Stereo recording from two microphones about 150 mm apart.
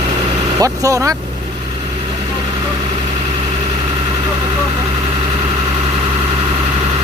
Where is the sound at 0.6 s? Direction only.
20° right (ahead or behind).